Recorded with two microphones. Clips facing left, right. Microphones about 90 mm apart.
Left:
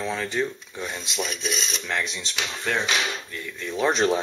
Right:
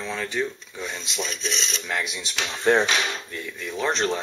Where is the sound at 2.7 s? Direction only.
25° right (ahead or behind).